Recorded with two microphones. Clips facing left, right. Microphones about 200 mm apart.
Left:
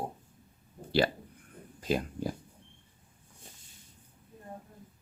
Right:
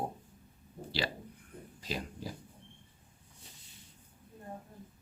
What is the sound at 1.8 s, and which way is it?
Speech, 50° left (ahead or behind).